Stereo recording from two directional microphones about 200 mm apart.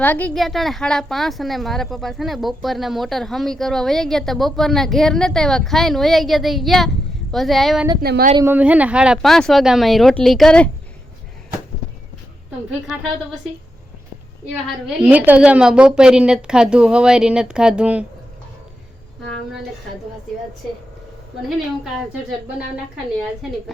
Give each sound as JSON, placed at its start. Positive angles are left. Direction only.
{"t": 0.0, "sound": "a woman's voice", "side_deg": 10}
{"t": 8.0, "sound": "speech", "side_deg": -50}
{"t": 8.4, "sound": "a woman's voice", "side_deg": -10}
{"t": 14.8, "sound": "a woman's voice", "side_deg": -10}